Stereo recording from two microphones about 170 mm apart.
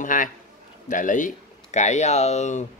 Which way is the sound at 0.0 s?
50° left (ahead or behind).